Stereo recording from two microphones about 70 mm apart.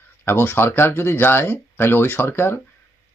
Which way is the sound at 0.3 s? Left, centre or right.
Left.